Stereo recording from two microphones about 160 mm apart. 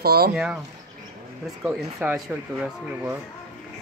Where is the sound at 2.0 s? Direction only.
5° right (ahead or behind).